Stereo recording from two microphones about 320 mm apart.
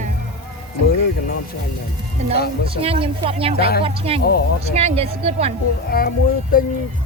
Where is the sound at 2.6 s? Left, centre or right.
Centre.